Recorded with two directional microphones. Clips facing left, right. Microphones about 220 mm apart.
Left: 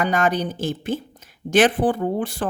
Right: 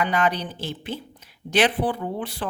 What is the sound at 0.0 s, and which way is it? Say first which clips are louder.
Speech: left 3 dB; 45° left (ahead or behind).